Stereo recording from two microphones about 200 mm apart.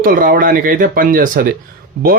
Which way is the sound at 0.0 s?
45° right (ahead or behind).